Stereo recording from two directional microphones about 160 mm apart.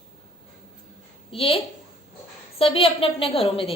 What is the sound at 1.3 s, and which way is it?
A woman's voice, 35° left (ahead or behind).